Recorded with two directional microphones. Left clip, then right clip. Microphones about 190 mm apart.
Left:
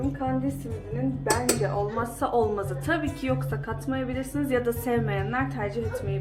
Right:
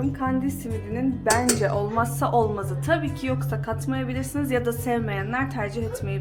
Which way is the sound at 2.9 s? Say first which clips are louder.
Right 3 dB; 10° right (ahead or behind).